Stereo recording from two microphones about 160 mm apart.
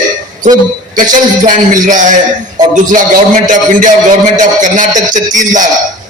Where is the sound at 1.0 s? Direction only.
55° right (ahead or behind).